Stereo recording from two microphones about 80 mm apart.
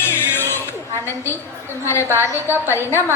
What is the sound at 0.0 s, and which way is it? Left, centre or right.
Music, left.